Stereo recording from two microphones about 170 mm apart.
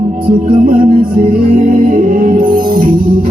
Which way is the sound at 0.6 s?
55° right (ahead or behind).